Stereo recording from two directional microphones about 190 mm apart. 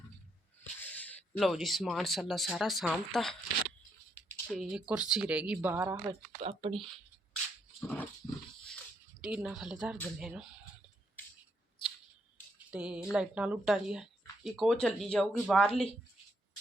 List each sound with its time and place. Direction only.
0.6 s speech: 10° left (ahead or behind)
4.5 s speech: 5° right (ahead or behind)
6.4 s speech: 30° right (ahead or behind)
7.8 s dog: 10° left (ahead or behind)
9.2 s speech: 5° right (ahead or behind)
12.5 s speech: 5° right (ahead or behind)